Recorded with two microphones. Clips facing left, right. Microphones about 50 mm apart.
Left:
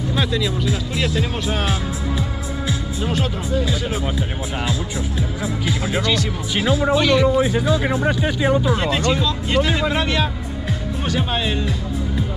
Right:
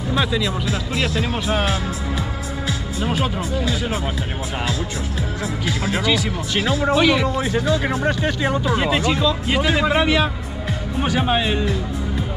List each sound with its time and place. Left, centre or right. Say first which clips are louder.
0.1 s speech: right 2 dB; centre
3.1 s speech: even; centre
5.9 s speech: right 1 dB; centre
7.2 s speech: left 3 dB; centre